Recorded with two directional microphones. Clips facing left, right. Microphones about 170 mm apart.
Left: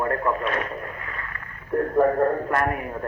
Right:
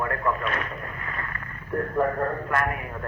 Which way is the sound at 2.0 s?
30° left (ahead or behind).